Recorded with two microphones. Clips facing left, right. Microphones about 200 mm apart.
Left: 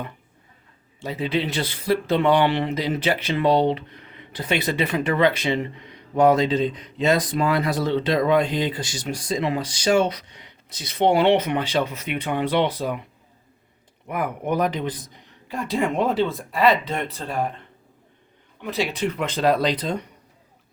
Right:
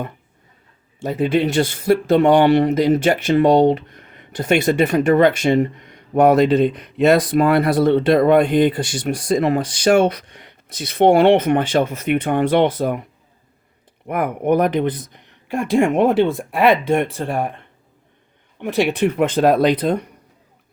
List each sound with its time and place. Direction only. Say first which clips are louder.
1.0 s speech: right 7 dB; 50° right (ahead or behind)
14.1 s speech: right 7 dB; 60° right (ahead or behind)
18.6 s speech: right 7 dB; 65° right (ahead or behind)